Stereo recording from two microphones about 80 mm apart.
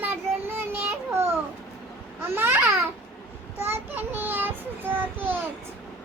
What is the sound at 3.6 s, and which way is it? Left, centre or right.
Child singing, right.